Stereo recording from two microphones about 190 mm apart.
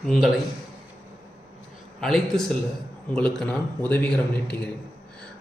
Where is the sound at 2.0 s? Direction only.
Centre (ahead or behind).